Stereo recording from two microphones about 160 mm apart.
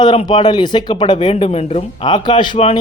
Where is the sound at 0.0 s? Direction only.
25° left (ahead or behind).